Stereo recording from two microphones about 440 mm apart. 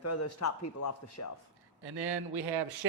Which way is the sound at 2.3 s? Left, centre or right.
Right.